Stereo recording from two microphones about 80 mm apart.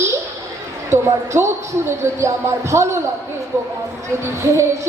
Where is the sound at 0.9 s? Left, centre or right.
Right.